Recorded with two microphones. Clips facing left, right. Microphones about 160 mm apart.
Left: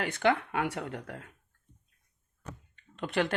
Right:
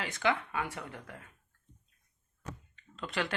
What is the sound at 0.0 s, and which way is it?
Speech, 60° left (ahead or behind).